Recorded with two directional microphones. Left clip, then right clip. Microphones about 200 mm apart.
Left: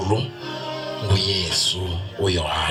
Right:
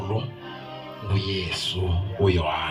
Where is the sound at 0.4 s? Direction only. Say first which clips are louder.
Left 8 dB; 40° left (ahead or behind).